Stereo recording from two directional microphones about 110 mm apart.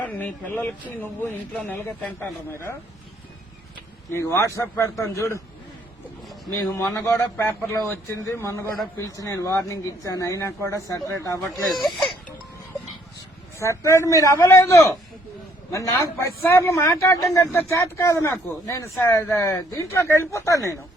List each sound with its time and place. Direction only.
0.0 s a man's voice: 15° left (ahead or behind)
4.1 s a man's voice: 20° left (ahead or behind)
6.7 s a man's voice: 25° left (ahead or behind)
11.7 s speech: centre (ahead or behind)
13.6 s a man's voice: 25° left (ahead or behind)